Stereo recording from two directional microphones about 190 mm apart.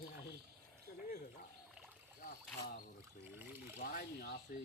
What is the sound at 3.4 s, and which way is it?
Speech, 10° right (ahead or behind).